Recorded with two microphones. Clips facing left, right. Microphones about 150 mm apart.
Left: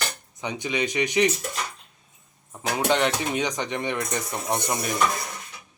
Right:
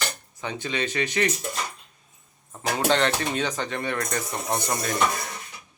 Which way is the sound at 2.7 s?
10° left (ahead or behind).